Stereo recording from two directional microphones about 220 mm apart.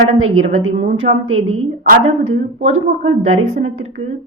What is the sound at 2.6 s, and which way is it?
A woman's voice, 30° right (ahead or behind).